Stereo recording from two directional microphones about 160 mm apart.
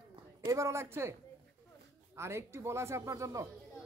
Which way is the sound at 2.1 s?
15° right (ahead or behind).